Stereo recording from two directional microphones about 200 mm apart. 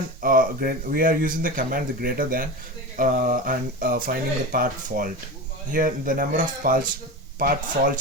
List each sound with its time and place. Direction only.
0.2 s speech: 45° right (ahead or behind)